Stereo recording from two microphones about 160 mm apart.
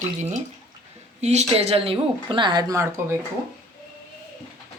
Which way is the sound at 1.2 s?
45° right (ahead or behind).